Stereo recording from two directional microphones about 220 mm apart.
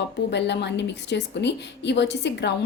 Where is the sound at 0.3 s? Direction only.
50° left (ahead or behind).